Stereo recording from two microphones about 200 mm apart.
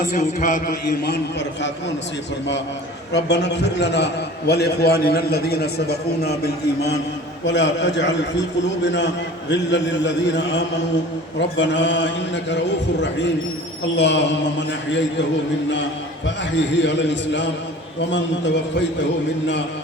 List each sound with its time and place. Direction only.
0.0 s a man's voice: 40° left (ahead or behind); by 1.7 s 55° left (ahead or behind)
3.1 s a man's voice: 60° left (ahead or behind)
13.9 s a man's voice: 60° left (ahead or behind)
16.2 s a man's voice: 65° left (ahead or behind)